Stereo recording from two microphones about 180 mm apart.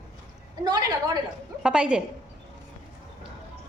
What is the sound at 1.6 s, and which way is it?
Speech, 5° right (ahead or behind).